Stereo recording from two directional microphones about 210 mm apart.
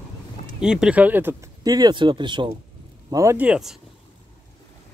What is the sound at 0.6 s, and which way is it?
Speech, 5° right (ahead or behind).